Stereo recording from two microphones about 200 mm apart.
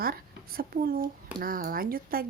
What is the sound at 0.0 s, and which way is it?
A child's voice, 50° right (ahead or behind).